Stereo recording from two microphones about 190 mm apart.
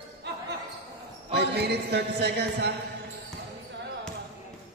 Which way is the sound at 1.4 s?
60° right (ahead or behind).